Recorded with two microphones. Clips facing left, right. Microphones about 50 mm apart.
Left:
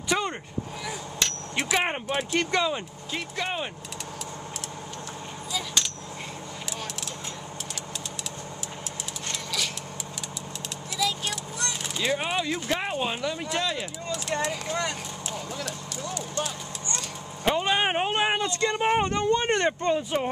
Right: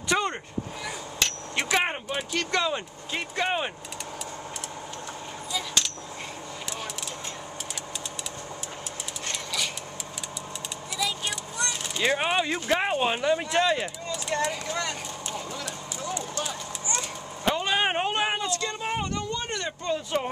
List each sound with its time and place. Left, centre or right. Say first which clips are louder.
0.1 s vehicle: right 1 dB; centre
1.6 s speech: even; centre
3.2 s speech: right 3 dB; centre
11.0 s a sound: left 2 dB; centre
12.0 s speech: right 3 dB; centre
14.3 s speech: right 1 dB; centre
15.3 s vehicle: left 2 dB; centre
16.4 s clip-clop: right 1 dB; centre
17.5 s vehicle: left 1 dB; centre
18.5 s speech: left 5 dB; left
20.1 s speech: left 1 dB; centre